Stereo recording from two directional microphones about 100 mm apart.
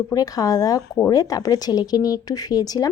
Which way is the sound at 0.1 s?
40° left (ahead or behind).